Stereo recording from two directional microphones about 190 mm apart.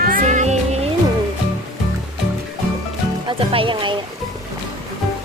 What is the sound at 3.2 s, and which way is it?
Speech, 30° right (ahead or behind).